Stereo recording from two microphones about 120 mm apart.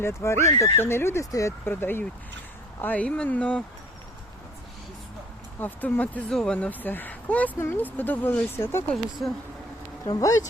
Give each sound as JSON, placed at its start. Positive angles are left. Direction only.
{"t": 0.0, "sound": "speech", "side_deg": 20}
{"t": 5.5, "sound": "speech", "side_deg": 15}
{"t": 10.1, "sound": "speech", "side_deg": 30}